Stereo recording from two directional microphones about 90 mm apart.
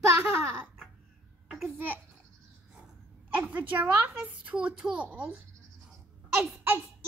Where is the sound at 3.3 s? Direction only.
15° right (ahead or behind).